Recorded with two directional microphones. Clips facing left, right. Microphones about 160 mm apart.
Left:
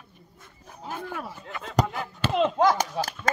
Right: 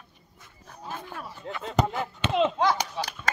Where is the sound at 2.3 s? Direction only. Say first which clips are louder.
Even; centre (ahead or behind).